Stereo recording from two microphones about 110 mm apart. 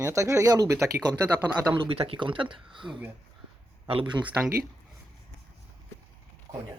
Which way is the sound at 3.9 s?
55° right (ahead or behind).